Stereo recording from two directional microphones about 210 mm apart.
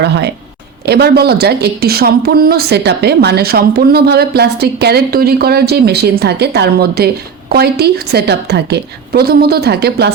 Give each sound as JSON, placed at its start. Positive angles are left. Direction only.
{"t": 0.0, "sound": "speech", "side_deg": -55}